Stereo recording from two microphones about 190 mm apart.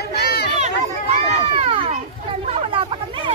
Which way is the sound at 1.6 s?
30° right (ahead or behind).